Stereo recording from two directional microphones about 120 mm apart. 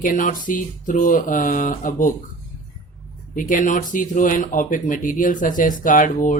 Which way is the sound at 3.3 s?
90° left.